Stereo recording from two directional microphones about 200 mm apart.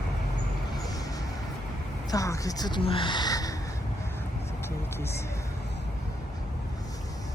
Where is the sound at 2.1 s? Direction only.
15° left (ahead or behind).